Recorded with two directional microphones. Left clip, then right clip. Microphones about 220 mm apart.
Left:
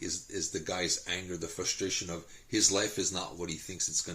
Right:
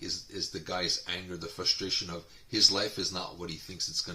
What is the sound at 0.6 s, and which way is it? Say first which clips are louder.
Speech: right 2 dB; 50° right (ahead or behind).